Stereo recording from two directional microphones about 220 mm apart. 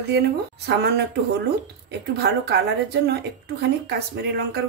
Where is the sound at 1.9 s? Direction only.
50° right (ahead or behind).